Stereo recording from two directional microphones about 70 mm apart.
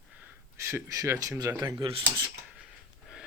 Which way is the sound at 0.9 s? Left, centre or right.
Right.